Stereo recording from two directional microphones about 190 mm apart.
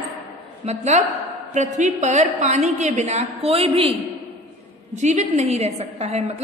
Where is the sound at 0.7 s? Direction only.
35° right (ahead or behind).